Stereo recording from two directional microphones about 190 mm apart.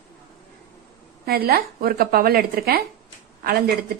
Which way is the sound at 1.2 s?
55° right (ahead or behind).